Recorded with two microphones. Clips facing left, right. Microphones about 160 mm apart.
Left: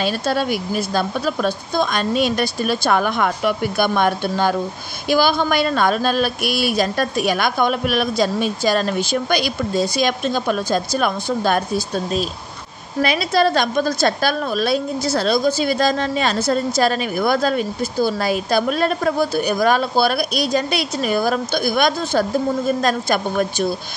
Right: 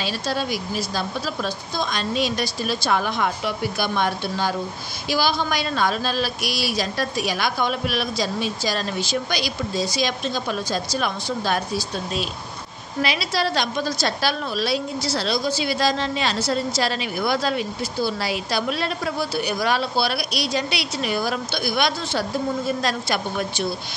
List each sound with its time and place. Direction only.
0.0 s a woman's voice: 55° left (ahead or behind)